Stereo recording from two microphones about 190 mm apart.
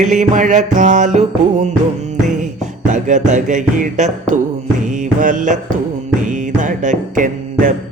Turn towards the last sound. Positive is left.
turn(degrees=-45)  # may be behind; listen again after turning